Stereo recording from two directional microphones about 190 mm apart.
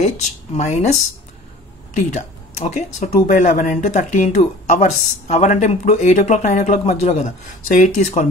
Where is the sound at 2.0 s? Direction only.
40° left (ahead or behind).